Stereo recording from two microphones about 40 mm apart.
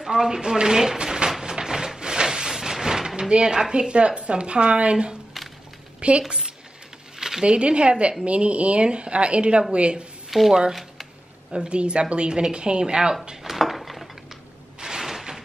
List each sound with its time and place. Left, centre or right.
0.0 s speech: centre
1.4 s a sound: centre
3.3 s a woman's voice: right
7.2 s a sound: centre
7.4 s a woman's voice: right
10.3 s speech: centre
10.7 s shuffling cards: centre
11.5 s a woman's voice: right
13.4 s dishes: centre
14.8 s a sound: centre